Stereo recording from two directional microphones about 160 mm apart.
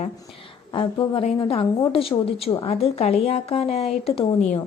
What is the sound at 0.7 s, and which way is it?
A woman's voice, 35° left (ahead or behind).